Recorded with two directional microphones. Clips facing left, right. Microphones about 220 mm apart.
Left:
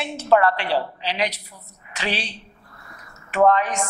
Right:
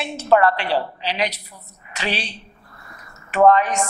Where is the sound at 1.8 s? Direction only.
15° right (ahead or behind).